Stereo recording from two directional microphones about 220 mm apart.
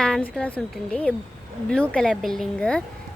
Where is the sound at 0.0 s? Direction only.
5° left (ahead or behind).